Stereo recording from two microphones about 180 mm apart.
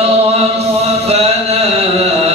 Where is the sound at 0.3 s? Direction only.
35° right (ahead or behind).